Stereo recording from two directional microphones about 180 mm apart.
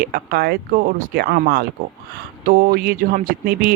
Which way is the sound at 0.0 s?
55° right (ahead or behind).